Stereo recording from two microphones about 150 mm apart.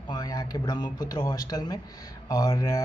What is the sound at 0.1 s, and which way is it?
A man's voice, 25° left (ahead or behind).